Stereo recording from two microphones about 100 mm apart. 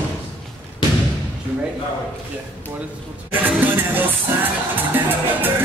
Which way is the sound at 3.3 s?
20° right (ahead or behind).